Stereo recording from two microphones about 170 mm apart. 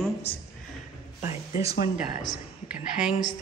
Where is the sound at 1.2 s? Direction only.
40° left (ahead or behind).